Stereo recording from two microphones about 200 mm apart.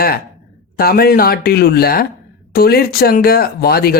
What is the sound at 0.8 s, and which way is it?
Speech, 50° left (ahead or behind).